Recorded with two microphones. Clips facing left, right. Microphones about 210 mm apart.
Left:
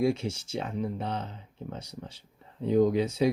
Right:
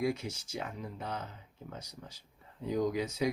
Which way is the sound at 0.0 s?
25° left (ahead or behind).